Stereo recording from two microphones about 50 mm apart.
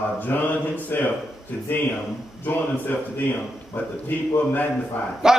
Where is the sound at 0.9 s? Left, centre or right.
Left.